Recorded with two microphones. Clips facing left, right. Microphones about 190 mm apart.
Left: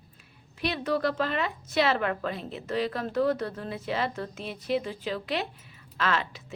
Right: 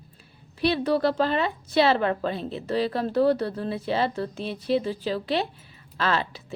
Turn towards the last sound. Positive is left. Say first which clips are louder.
# right 3 dB
turn(degrees=-35)  # may be behind; listen again after turning